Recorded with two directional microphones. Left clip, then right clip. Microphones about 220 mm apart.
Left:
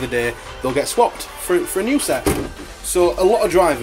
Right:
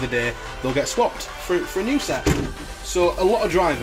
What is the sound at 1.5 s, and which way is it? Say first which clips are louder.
Speech: left 5 dB; 15° left (ahead or behind).